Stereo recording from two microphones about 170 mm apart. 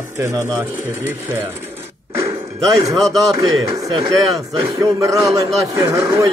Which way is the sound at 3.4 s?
20° right (ahead or behind).